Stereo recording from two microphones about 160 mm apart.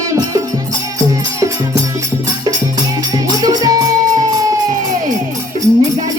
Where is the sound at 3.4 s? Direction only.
25° right (ahead or behind).